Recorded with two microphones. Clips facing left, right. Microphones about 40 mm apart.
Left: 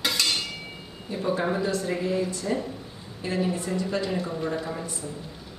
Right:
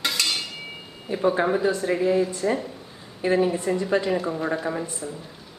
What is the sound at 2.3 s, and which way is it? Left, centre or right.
Speech, right.